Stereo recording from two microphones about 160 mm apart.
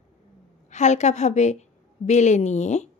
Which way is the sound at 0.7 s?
45° left (ahead or behind).